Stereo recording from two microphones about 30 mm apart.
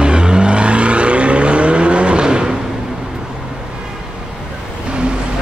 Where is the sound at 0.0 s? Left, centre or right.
Right.